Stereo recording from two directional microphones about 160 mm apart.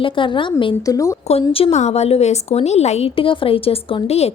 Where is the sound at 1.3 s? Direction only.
35° left (ahead or behind).